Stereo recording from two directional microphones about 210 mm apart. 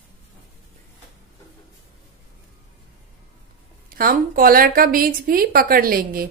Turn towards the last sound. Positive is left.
turn(degrees=-45)  # may be behind; listen again after turning